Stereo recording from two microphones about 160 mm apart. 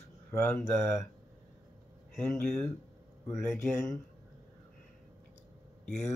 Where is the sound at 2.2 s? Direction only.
15° left (ahead or behind).